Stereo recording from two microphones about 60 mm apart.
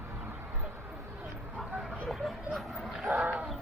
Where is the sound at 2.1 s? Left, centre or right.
Centre.